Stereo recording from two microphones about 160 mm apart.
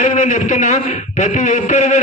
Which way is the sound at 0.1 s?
50° left (ahead or behind).